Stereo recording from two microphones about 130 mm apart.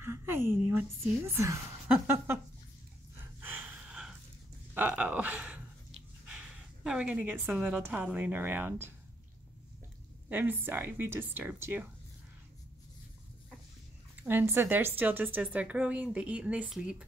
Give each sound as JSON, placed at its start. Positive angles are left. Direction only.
{"t": 0.0, "sound": "a woman's voice", "side_deg": -20}
{"t": 1.2, "sound": "a sound", "side_deg": -20}
{"t": 3.3, "sound": "gasp", "side_deg": -15}
{"t": 4.7, "sound": "a sound", "side_deg": -10}
{"t": 6.2, "sound": "a woman's voice", "side_deg": -5}
{"t": 10.3, "sound": "a woman's voice", "side_deg": -15}
{"t": 14.2, "sound": "a woman's voice", "side_deg": -15}